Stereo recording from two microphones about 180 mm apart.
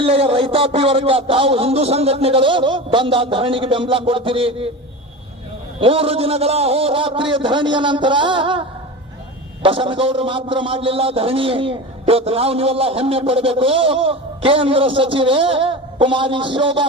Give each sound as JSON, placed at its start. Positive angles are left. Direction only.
{"t": 0.0, "sound": "a man's voice", "side_deg": -30}
{"t": 5.8, "sound": "a man's voice", "side_deg": -30}
{"t": 9.6, "sound": "a man's voice", "side_deg": -30}